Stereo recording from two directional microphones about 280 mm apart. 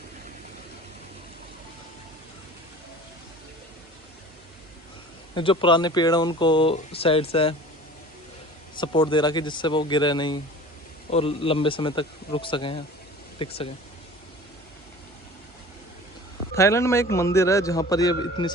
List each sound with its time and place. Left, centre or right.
5.3 s speech: centre
8.8 s a man's voice: centre
16.6 s speech: centre